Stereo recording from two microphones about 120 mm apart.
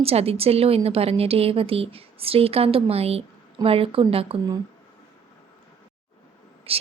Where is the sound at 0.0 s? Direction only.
55° right (ahead or behind).